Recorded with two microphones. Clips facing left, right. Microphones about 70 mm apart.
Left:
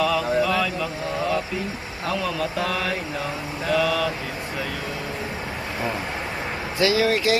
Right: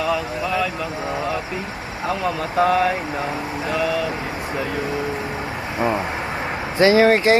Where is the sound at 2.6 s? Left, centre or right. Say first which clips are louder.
Right 13 dB; right.